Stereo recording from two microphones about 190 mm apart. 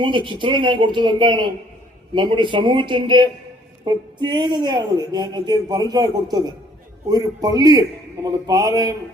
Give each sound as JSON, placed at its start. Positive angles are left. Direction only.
{"t": 0.0, "sound": "speech", "side_deg": -25}